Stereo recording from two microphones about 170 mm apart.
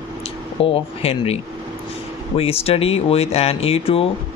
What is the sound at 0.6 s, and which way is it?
Speech, 35° left (ahead or behind).